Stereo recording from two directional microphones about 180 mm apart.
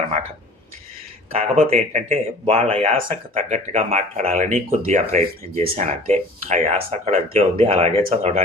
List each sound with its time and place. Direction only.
1.3 s speech: 35° right (ahead or behind)